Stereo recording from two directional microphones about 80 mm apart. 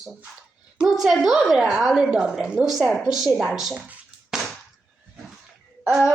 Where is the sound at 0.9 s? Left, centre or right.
Centre.